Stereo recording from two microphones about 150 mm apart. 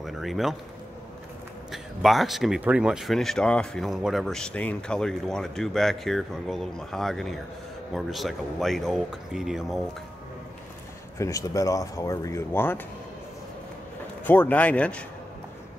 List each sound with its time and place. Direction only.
0.0 s a sound: centre (ahead or behind)
1.7 s speech: centre (ahead or behind)
11.1 s speech: 20° left (ahead or behind)
14.2 s a man's voice: 10° left (ahead or behind)